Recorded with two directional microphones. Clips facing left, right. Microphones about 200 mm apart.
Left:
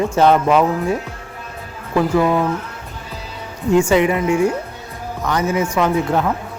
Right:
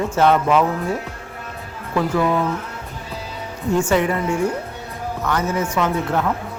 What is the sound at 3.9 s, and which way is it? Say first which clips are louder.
A man's voice: left 4 dB; 15° left (ahead or behind).